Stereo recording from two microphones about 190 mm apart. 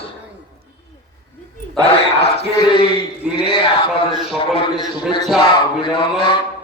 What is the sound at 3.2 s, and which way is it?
Speech, 5° right (ahead or behind).